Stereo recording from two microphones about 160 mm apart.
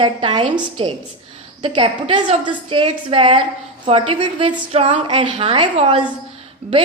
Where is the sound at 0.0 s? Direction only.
30° right (ahead or behind).